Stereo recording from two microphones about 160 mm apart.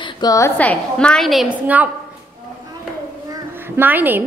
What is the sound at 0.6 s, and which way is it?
A woman's voice, 10° left (ahead or behind).